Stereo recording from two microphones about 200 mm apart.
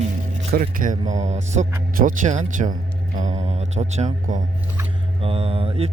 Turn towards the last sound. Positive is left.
turn(degrees=-30)  # may be behind; listen again after turning